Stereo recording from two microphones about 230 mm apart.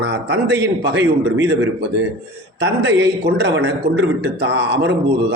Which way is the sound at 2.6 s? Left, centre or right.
Right.